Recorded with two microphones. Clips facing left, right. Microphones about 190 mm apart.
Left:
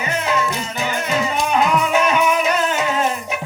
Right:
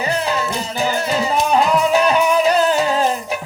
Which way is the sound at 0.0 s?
35° right (ahead or behind).